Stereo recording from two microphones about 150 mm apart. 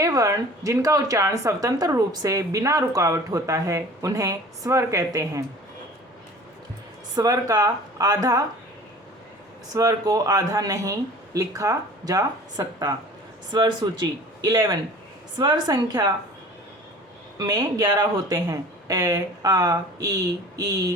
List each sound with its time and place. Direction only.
0.0 s speech: 20° right (ahead or behind)
7.2 s speech: 25° right (ahead or behind)
9.7 s speech: 25° right (ahead or behind)
17.3 s speech: 30° right (ahead or behind)